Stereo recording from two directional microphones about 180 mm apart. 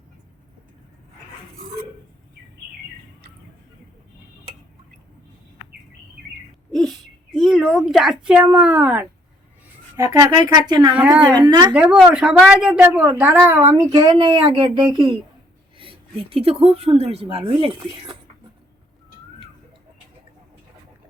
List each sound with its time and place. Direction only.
6.7 s bird: centre (ahead or behind)
7.3 s speech: centre (ahead or behind); by 10.9 s 25° right (ahead or behind)
10.9 s a woman's voice: 5° right (ahead or behind)
11.2 s speech: 25° right (ahead or behind)
11.7 s a woman's voice: 5° right (ahead or behind); by 18.2 s 25° right (ahead or behind)